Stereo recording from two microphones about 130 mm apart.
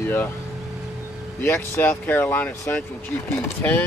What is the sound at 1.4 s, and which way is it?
Speech, 15° left (ahead or behind).